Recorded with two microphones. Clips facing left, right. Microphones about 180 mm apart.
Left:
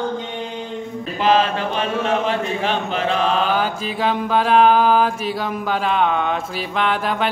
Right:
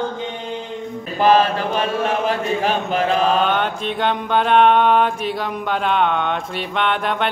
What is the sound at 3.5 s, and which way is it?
Mantra, centre (ahead or behind).